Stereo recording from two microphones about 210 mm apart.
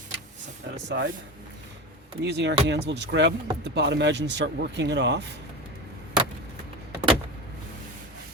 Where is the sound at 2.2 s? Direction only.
55° right (ahead or behind).